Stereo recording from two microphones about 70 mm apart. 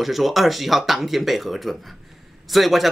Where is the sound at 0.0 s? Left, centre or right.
Centre.